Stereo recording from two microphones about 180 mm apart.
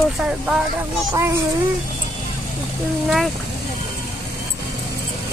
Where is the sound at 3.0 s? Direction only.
Centre (ahead or behind).